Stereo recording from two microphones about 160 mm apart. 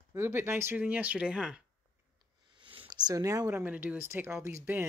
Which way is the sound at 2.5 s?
30° right (ahead or behind).